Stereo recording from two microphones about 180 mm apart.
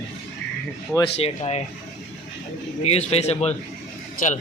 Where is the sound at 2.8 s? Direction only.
35° left (ahead or behind).